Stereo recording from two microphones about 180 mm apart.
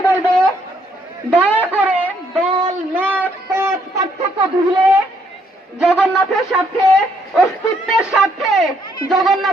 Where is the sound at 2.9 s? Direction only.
10° right (ahead or behind).